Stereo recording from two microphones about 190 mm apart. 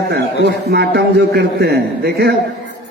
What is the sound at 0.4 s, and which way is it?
A man's voice, 60° right (ahead or behind).